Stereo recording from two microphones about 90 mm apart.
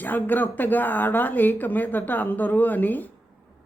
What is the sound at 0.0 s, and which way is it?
Speech, 20° left (ahead or behind).